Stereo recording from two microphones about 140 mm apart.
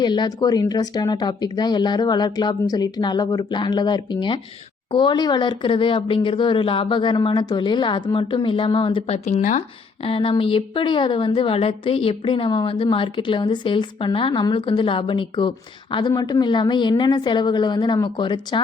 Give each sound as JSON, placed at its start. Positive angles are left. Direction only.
{"t": 0.0, "sound": "a woman's voice", "side_deg": 30}
{"t": 10.0, "sound": "a woman's voice", "side_deg": 40}